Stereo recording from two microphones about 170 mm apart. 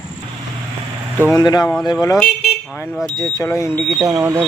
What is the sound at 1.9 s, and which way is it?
Speech, 20° left (ahead or behind).